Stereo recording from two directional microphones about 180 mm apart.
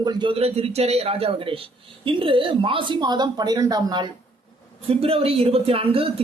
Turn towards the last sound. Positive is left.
turn(degrees=-30)  # may be behind; listen again after turning